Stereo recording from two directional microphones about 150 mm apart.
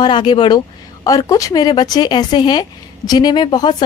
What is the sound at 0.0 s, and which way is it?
Speech, 30° left (ahead or behind).